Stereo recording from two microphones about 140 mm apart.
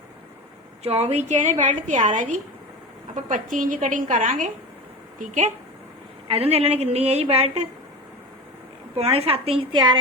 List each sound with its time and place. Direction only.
0.9 s a woman's voice: 50° right (ahead or behind)
6.3 s a woman's voice: 45° right (ahead or behind)
9.1 s a woman's voice: 45° right (ahead or behind)